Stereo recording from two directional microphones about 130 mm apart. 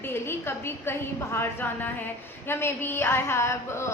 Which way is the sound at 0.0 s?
20° left (ahead or behind).